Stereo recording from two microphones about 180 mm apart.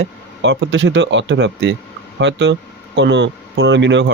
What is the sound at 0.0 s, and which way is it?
Speech, 85° right.